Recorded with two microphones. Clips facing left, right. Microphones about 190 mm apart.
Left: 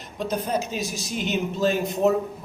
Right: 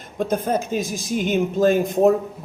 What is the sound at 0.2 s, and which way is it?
Speech, 50° right (ahead or behind).